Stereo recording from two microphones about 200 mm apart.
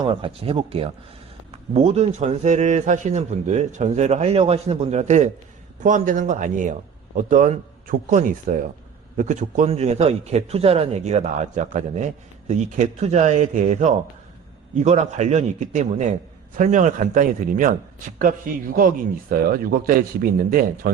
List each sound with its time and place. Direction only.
0.0 s a man's voice: 25° right (ahead or behind); by 17.7 s 40° right (ahead or behind)
18.8 s speech: 45° right (ahead or behind)